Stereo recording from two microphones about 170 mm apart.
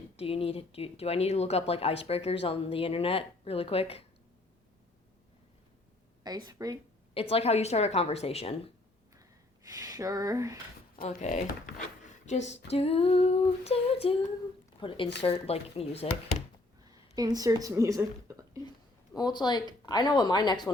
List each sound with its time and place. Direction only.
0.2 s speech: 35° left (ahead or behind)
6.2 s speech: 20° right (ahead or behind)
7.1 s speech: 35° left (ahead or behind)
9.7 s speech: 20° right (ahead or behind)
11.1 s speech: 45° left (ahead or behind)
16.9 s a woman's voice: 20° right (ahead or behind)
19.1 s speech: 25° left (ahead or behind)